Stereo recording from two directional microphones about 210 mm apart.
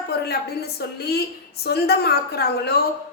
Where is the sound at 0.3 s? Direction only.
50° left (ahead or behind).